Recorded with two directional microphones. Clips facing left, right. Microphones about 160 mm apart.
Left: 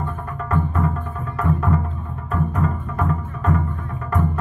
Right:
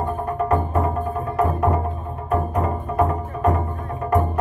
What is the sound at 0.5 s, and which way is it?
Music, 35° right (ahead or behind).